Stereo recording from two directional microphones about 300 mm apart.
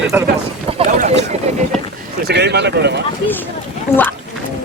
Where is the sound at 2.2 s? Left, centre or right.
Right.